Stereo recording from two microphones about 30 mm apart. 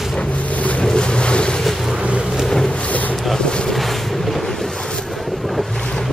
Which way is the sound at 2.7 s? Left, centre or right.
Left.